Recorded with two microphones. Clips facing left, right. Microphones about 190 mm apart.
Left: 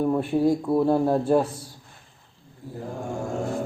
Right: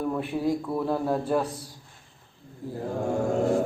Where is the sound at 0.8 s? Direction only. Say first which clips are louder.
Left 6 dB; 25° left (ahead or behind).